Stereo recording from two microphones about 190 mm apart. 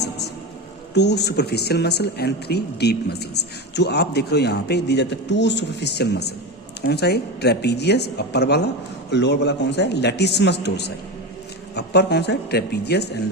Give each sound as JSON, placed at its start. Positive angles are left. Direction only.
{"t": 0.9, "sound": "speech", "side_deg": 60}